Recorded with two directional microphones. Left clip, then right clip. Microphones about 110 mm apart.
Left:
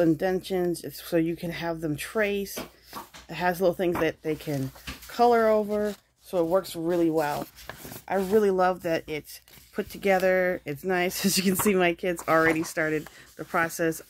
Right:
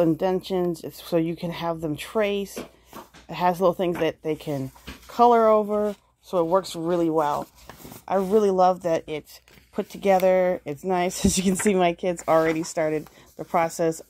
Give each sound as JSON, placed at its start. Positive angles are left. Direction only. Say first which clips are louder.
{"t": 0.0, "sound": "speech", "louder": "right 2 dB", "side_deg": -25}
{"t": 8.4, "sound": "speech", "louder": "right 4 dB", "side_deg": -35}